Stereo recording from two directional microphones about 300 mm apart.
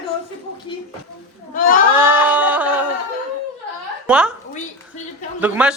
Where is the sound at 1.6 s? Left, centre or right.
Left.